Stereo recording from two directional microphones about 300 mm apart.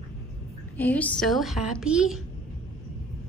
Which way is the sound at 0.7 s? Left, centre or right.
Centre.